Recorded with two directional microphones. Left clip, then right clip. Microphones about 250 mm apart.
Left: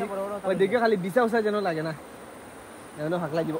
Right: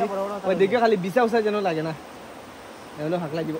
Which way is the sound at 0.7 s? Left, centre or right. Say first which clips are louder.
Right 3 dB; centre.